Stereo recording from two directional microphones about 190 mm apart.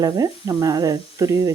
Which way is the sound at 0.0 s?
20° right (ahead or behind).